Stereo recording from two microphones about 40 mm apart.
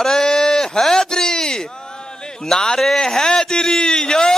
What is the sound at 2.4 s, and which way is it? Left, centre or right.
Speech, centre.